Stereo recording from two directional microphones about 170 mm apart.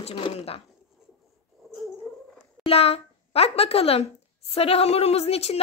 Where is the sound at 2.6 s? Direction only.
35° left (ahead or behind).